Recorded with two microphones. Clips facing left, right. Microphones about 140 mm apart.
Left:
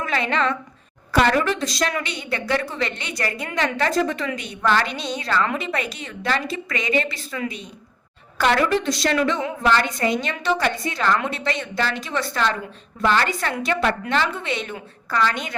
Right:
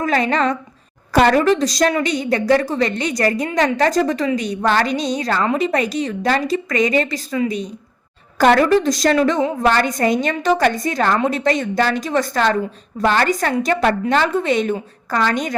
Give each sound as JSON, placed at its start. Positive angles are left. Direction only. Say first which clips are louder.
{"t": 0.0, "sound": "a woman's voice", "louder": "right 5 dB", "side_deg": -40}
{"t": 8.4, "sound": "a woman's voice", "louder": "right 6 dB", "side_deg": -40}